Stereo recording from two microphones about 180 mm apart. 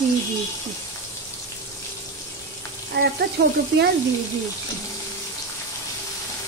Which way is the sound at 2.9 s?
70° right (ahead or behind).